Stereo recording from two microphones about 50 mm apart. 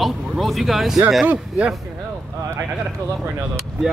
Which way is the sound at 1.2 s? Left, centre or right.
Right.